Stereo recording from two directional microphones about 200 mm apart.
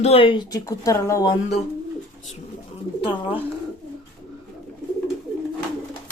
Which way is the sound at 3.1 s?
10° right (ahead or behind).